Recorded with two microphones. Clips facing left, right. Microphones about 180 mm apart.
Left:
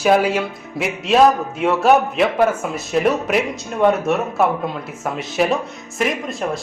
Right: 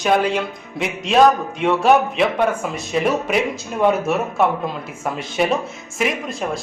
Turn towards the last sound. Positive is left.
turn(degrees=0)  # may be behind; listen again after turning